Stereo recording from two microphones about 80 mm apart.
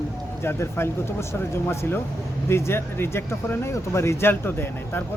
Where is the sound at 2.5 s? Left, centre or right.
Left.